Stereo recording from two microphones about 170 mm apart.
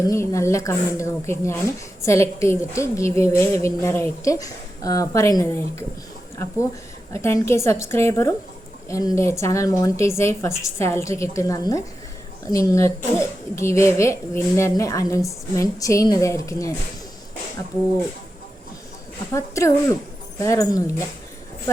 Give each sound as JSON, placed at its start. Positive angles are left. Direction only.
{"t": 0.1, "sound": "a woman's voice", "side_deg": 15}
{"t": 19.3, "sound": "a woman's voice", "side_deg": 20}